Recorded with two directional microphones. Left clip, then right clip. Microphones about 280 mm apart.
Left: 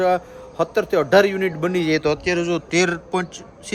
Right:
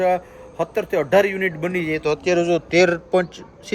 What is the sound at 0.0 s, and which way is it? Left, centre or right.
A man's voice, centre.